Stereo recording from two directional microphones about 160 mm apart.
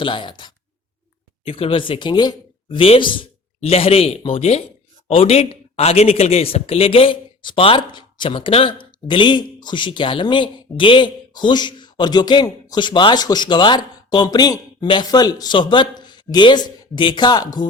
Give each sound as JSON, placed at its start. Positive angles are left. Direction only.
{"t": 0.0, "sound": "speech", "side_deg": 30}